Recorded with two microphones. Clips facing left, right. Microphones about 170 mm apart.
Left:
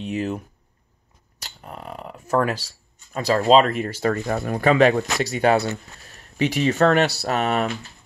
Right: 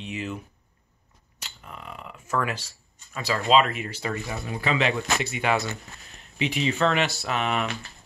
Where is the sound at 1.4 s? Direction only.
40° left (ahead or behind).